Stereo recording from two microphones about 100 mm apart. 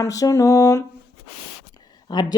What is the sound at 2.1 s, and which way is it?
Speech, 45° left (ahead or behind).